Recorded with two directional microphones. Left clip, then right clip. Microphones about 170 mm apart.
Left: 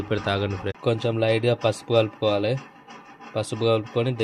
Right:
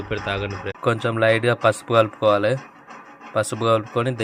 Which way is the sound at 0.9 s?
15° left (ahead or behind).